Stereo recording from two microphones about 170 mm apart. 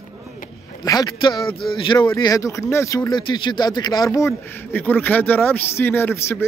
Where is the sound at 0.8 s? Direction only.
25° left (ahead or behind).